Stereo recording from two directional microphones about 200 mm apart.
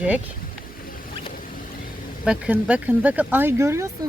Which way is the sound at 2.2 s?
5° right (ahead or behind).